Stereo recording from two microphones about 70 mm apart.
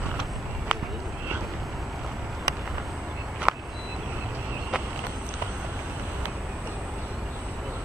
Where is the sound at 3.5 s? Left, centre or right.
Centre.